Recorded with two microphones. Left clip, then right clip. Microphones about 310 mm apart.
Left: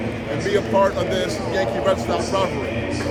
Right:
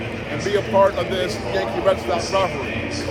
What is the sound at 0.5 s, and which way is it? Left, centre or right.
Speech, centre.